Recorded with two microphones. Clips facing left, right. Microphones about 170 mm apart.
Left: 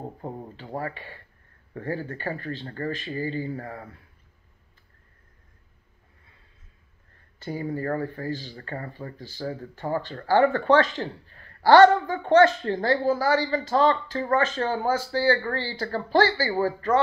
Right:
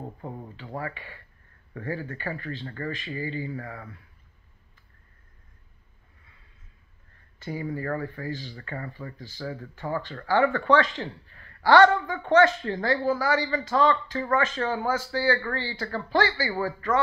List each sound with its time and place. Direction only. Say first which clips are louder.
0.2 s speech: left 2 dB; 35° left (ahead or behind)
7.3 s speech: left 2 dB; 30° left (ahead or behind)